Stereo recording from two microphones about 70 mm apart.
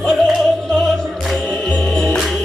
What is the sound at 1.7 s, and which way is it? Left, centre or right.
Music, centre.